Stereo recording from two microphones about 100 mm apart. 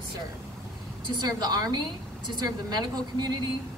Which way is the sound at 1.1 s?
45° right (ahead or behind).